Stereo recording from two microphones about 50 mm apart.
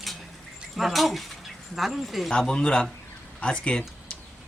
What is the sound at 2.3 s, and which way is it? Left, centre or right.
A man's voice, centre.